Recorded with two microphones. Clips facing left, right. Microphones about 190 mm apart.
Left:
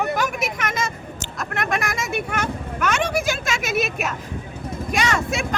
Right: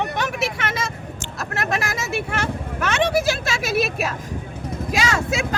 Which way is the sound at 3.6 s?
30° right (ahead or behind).